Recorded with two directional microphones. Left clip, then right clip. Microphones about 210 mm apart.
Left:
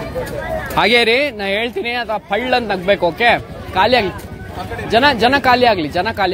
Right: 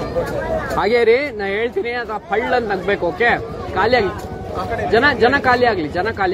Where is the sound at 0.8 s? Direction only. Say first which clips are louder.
Left 2 dB; 50° left (ahead or behind).